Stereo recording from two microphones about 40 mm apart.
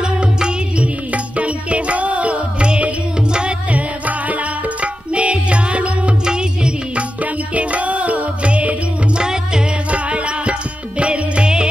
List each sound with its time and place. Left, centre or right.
0.0 s music: right
1.1 s music: right
3.7 s music: right
7.5 s music: right
9.2 s music: centre
9.8 s music: right